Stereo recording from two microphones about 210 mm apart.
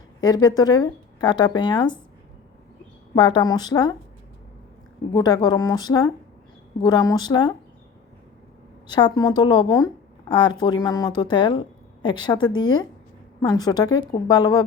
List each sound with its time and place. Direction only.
0.2 s speech: 20° left (ahead or behind)
3.2 s speech: 20° left (ahead or behind)
5.1 s speech: 20° left (ahead or behind)
8.9 s speech: 20° left (ahead or behind)